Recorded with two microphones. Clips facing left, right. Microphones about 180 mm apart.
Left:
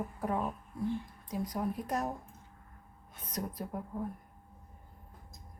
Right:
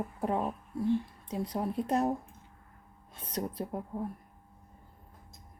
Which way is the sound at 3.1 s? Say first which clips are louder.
Right 3 dB; 30° right (ahead or behind).